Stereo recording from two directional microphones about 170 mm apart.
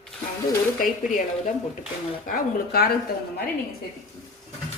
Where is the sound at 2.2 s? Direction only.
60° left (ahead or behind).